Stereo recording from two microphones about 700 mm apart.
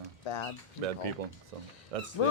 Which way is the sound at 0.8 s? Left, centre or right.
Right.